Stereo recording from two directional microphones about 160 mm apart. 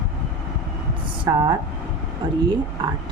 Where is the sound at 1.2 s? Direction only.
30° right (ahead or behind).